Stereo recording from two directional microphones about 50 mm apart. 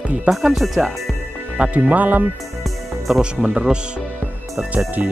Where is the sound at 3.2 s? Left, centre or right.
Centre.